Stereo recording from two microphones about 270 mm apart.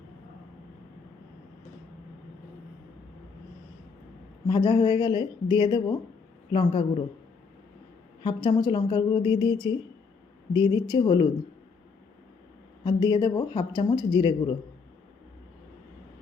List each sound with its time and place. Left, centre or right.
4.4 s a woman's voice: centre
8.2 s speech: centre
12.8 s speech: centre